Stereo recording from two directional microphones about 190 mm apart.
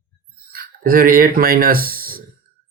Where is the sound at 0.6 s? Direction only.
50° right (ahead or behind).